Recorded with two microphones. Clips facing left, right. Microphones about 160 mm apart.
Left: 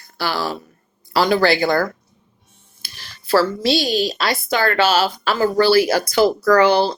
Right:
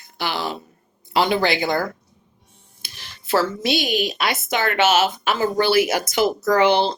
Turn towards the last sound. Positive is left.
turn(degrees=-20)  # may be behind; listen again after turning